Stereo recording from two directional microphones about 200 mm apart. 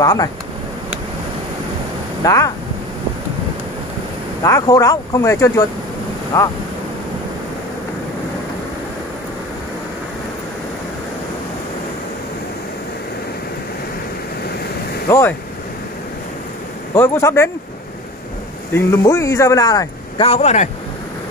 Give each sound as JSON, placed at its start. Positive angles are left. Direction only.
{"t": 0.0, "sound": "speech", "side_deg": 20}
{"t": 2.2, "sound": "speech", "side_deg": 15}
{"t": 4.4, "sound": "speech", "side_deg": 15}
{"t": 15.0, "sound": "speech", "side_deg": 15}
{"t": 16.9, "sound": "speech", "side_deg": 10}
{"t": 18.7, "sound": "speech", "side_deg": 10}